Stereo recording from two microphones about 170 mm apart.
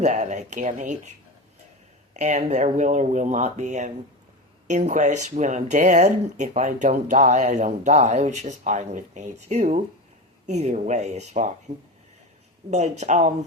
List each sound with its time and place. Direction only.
0.0 s speech: 45° right (ahead or behind)
2.1 s speech: 45° right (ahead or behind)
12.7 s speech: 45° right (ahead or behind)